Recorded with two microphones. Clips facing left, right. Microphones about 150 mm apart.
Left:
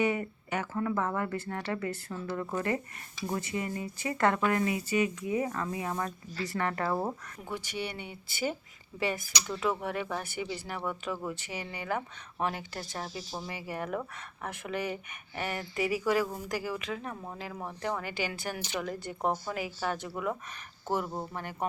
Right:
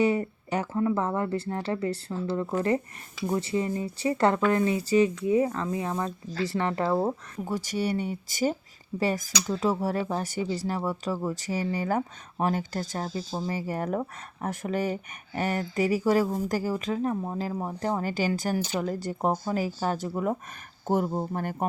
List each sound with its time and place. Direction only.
0.0 s speech: 30° right (ahead or behind)
7.3 s speech: 40° right (ahead or behind)